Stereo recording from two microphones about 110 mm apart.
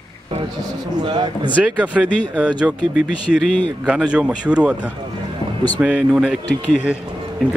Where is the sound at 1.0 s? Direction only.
45° right (ahead or behind).